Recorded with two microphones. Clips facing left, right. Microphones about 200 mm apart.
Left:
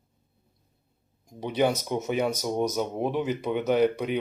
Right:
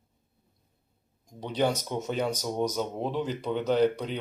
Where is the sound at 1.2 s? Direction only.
10° left (ahead or behind).